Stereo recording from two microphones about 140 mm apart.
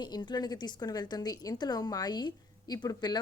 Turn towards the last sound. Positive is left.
turn(degrees=30)  # may be behind; listen again after turning